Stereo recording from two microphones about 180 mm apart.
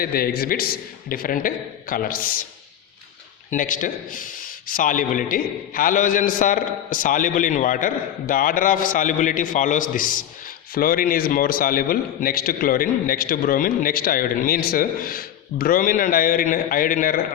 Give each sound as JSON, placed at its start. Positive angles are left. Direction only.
{"t": 0.0, "sound": "a man's voice", "side_deg": 55}
{"t": 3.5, "sound": "a man's voice", "side_deg": 45}